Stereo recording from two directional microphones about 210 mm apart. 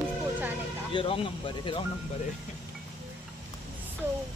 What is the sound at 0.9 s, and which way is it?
Speech, 25° left (ahead or behind).